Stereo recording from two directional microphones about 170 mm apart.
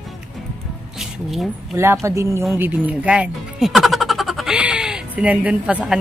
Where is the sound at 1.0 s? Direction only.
Centre (ahead or behind).